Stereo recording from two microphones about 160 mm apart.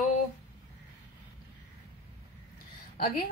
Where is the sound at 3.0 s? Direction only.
65° left (ahead or behind).